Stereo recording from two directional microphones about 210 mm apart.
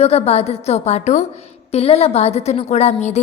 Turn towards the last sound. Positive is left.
turn(degrees=30)  # may be behind; listen again after turning